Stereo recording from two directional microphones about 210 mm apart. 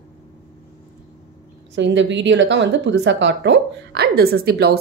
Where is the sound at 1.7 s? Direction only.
60° right (ahead or behind).